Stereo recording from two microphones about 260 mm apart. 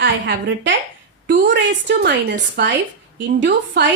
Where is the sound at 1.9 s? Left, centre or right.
Right.